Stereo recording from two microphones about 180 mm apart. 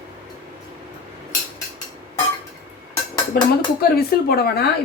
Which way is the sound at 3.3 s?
60° left (ahead or behind).